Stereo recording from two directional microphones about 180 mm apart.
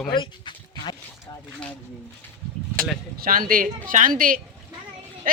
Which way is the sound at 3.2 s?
50° right (ahead or behind).